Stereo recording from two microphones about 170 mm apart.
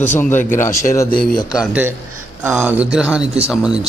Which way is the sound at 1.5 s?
10° right (ahead or behind).